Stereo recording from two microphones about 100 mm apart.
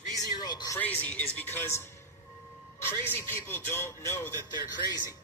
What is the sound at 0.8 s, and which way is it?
A man's voice, 15° left (ahead or behind).